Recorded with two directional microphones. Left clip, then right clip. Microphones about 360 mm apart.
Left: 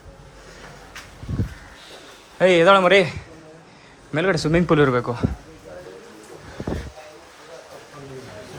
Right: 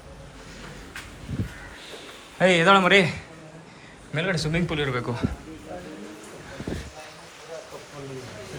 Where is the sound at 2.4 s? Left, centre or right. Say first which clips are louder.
Left 4 dB; centre.